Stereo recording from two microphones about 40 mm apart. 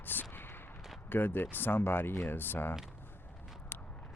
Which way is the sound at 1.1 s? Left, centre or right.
Left.